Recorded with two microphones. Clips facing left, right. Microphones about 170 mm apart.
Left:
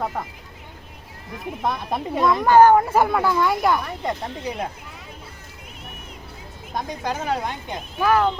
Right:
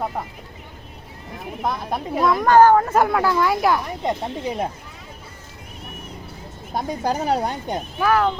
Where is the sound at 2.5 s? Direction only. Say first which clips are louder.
Even; 15° left (ahead or behind).